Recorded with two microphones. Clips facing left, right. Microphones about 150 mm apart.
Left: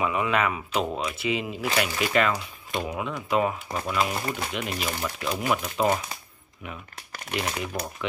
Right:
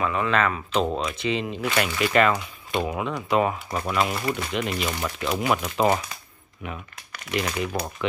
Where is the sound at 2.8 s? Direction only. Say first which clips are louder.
Right 4 dB; 60° right (ahead or behind).